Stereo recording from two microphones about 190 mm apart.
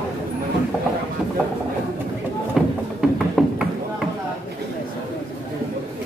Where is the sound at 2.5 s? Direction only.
Centre (ahead or behind).